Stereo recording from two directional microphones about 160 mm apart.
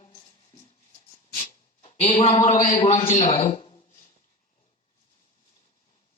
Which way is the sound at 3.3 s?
35° left (ahead or behind).